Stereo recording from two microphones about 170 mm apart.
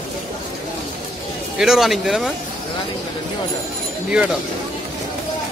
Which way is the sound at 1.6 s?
Centre (ahead or behind).